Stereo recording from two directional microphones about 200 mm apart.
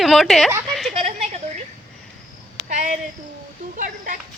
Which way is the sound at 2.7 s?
35° right (ahead or behind).